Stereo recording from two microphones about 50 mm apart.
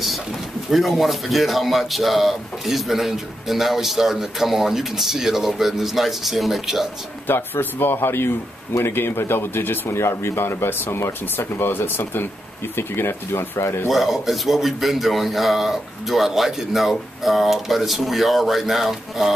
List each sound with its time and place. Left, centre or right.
0.7 s speech: centre
7.2 s speech: left
13.8 s speech: centre